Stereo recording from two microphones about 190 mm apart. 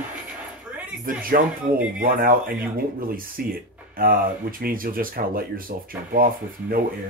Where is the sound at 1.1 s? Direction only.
50° right (ahead or behind).